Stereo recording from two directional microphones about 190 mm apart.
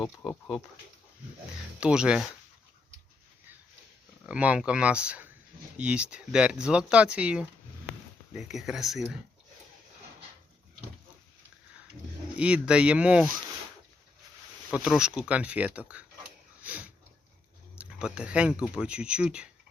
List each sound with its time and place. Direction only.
0.2 s speech: 5° left (ahead or behind)
1.8 s speech: 5° right (ahead or behind)
4.3 s speech: 5° right (ahead or behind)
12.4 s speech: 5° right (ahead or behind)
14.7 s speech: 5° right (ahead or behind)
16.6 s sniff: 5° right (ahead or behind)
17.7 s speech: 5° right (ahead or behind)